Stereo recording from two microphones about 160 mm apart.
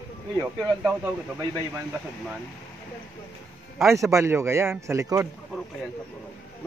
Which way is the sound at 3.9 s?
20° right (ahead or behind).